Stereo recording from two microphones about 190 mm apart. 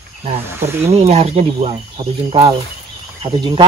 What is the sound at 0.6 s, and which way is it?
Speech, 15° right (ahead or behind).